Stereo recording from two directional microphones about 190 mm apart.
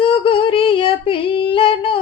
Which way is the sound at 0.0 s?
30° left (ahead or behind).